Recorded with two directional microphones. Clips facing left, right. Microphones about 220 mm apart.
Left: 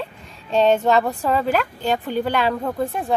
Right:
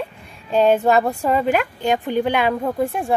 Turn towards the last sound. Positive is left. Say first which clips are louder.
# right 2 dB
turn(degrees=-10)  # may be behind; listen again after turning